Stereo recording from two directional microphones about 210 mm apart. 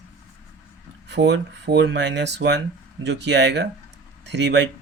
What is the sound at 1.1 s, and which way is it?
Speech, 55° right (ahead or behind).